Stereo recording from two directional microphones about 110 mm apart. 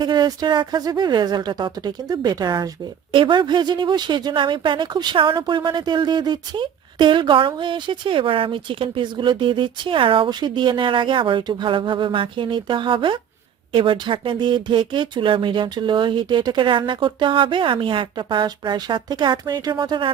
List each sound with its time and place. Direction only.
0.0 s speech: 40° right (ahead or behind)